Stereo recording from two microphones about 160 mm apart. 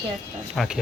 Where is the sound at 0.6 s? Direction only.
Centre (ahead or behind).